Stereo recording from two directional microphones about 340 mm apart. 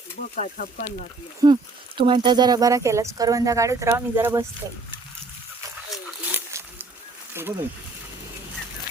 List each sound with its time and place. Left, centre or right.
0.3 s speech: left
1.4 s speech: centre
5.9 s a sound: centre
7.3 s speech: centre